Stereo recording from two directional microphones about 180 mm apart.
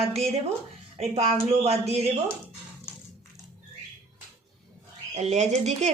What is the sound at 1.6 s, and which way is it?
Speech, 35° right (ahead or behind).